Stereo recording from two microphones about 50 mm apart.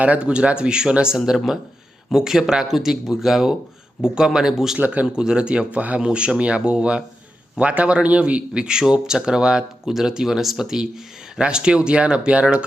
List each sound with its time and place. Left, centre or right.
0.0 s speech: right; by 4.8 s centre
4.8 s speech: right
5.0 s speech: centre